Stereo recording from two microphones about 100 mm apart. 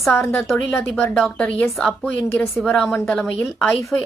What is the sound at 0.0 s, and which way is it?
Speech, centre (ahead or behind).